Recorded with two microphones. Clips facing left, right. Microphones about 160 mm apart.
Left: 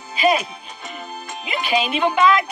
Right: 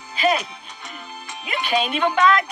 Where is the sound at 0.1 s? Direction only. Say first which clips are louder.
Left 2 dB; 15° left (ahead or behind).